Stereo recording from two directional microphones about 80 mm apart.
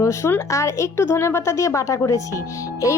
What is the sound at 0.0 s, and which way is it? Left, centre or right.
A woman's voice, left.